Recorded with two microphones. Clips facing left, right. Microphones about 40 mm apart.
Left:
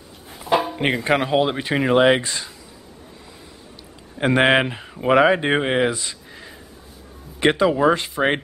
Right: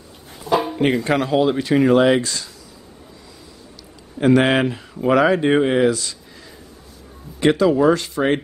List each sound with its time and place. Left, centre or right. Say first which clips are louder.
0.7 s speech: right 2 dB; centre
4.2 s speech: right 1 dB; left